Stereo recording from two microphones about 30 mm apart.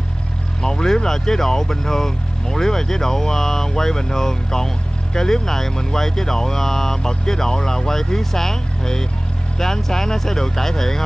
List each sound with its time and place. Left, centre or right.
0.6 s speech: centre